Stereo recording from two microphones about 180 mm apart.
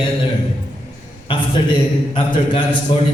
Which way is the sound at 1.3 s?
30° left (ahead or behind).